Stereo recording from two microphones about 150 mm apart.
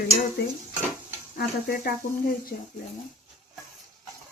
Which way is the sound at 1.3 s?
90° left.